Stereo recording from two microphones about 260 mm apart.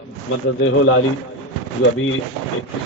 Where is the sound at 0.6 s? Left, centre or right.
Left.